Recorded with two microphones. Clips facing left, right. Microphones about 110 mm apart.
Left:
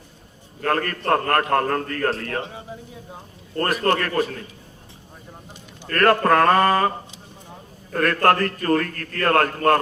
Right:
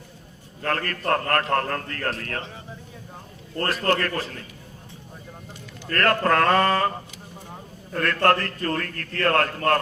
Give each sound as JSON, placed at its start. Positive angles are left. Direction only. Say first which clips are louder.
{"t": 0.6, "sound": "a man's voice", "louder": "left 4 dB", "side_deg": 25}
{"t": 3.6, "sound": "a man's voice", "louder": "left 2 dB", "side_deg": 25}
{"t": 5.9, "sound": "a man's voice", "louder": "left 4 dB", "side_deg": 25}
{"t": 8.0, "sound": "a man's voice", "louder": "left 3 dB", "side_deg": 25}